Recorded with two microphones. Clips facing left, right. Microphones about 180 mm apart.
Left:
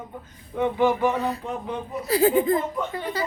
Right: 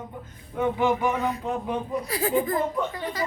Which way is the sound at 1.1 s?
35° left (ahead or behind).